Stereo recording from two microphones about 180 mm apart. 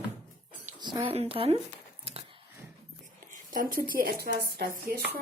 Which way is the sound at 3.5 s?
50° right (ahead or behind).